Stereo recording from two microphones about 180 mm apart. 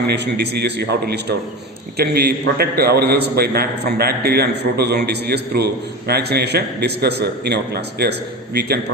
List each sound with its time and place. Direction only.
0.1 s a man's voice: 65° right (ahead or behind)